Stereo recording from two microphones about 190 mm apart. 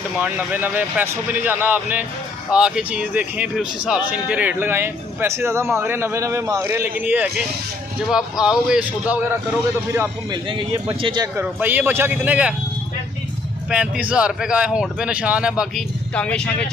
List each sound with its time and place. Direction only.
0.2 s a man's voice: 10° right (ahead or behind)
10.3 s speech: 25° right (ahead or behind)
11.3 s a man's voice: 10° right (ahead or behind)
13.7 s speech: 5° right (ahead or behind)
16.2 s speech: 5° left (ahead or behind)